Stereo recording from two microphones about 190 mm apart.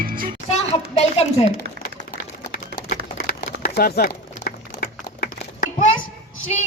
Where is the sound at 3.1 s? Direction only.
50° left (ahead or behind).